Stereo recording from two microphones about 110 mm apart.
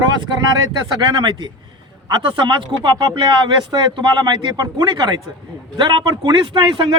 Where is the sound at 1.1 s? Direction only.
45° right (ahead or behind).